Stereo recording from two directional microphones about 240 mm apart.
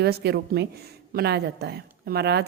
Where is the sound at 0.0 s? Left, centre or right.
Right.